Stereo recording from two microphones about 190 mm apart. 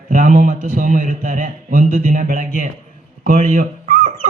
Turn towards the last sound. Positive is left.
turn(degrees=-45)  # may be behind; listen again after turning